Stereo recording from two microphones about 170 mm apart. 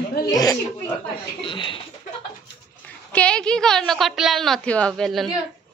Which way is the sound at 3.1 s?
5° left (ahead or behind).